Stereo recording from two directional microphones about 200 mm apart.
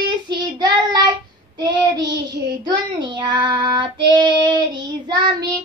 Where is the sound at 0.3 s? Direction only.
20° right (ahead or behind).